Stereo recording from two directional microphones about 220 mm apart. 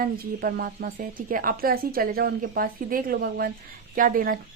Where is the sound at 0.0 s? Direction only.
40° right (ahead or behind).